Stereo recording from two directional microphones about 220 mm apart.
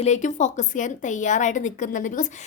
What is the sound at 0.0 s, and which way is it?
A woman's voice, 35° left (ahead or behind).